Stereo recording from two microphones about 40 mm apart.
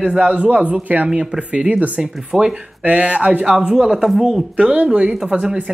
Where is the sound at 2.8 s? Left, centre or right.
Right.